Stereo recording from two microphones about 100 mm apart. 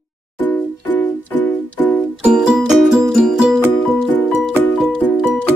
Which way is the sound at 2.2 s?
5° right (ahead or behind).